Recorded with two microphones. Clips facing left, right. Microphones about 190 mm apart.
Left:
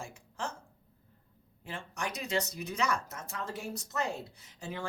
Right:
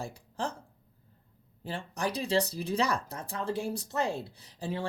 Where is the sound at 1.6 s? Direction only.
35° right (ahead or behind).